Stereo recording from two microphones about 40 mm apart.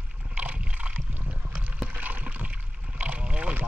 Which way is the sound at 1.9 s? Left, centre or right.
Right.